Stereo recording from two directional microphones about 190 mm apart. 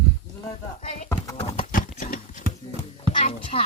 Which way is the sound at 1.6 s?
45° left (ahead or behind).